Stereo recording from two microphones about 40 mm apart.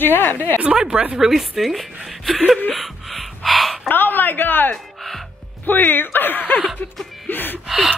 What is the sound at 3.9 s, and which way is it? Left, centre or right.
Speech, left.